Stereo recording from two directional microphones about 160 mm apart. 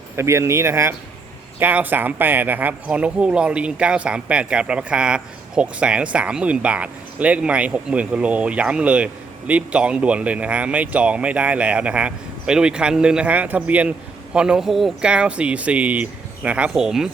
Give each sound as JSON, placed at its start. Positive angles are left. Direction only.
{"t": 0.2, "sound": "speech", "side_deg": -15}